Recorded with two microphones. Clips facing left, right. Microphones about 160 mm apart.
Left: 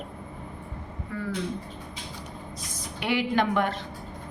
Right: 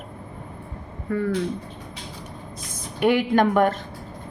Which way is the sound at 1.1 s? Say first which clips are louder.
Right 10 dB; 55° right (ahead or behind).